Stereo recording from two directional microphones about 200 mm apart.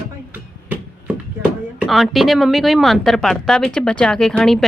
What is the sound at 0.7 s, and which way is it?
Speech, 5° right (ahead or behind).